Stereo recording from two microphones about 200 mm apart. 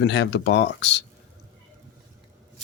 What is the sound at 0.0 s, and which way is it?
Speech, 60° left (ahead or behind).